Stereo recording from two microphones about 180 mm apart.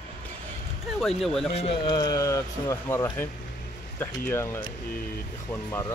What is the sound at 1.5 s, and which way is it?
Speech, 30° left (ahead or behind).